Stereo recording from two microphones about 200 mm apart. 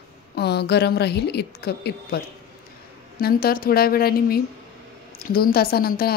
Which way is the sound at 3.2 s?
45° left (ahead or behind).